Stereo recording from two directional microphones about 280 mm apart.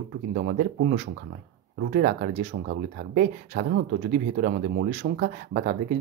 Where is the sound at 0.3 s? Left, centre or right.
Right.